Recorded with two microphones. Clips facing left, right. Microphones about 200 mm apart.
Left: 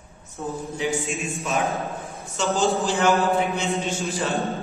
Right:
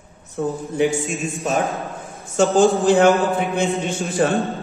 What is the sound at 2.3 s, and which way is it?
Speech, 50° right (ahead or behind).